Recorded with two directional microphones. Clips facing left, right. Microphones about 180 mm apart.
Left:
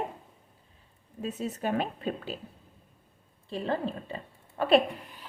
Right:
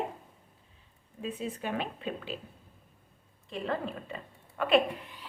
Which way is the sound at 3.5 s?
30° left (ahead or behind).